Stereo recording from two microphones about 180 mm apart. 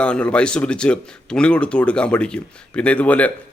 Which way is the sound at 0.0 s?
5° left (ahead or behind).